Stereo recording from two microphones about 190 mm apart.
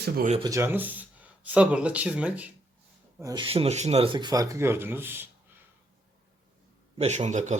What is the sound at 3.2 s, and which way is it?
Speech, 20° right (ahead or behind).